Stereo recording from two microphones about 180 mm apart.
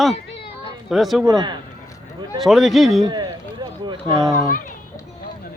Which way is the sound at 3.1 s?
25° right (ahead or behind).